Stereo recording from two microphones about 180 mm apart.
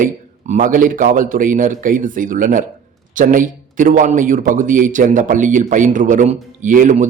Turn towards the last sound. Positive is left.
turn(degrees=-45)  # may be behind; listen again after turning